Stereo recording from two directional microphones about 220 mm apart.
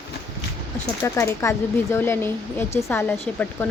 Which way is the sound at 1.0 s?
10° left (ahead or behind).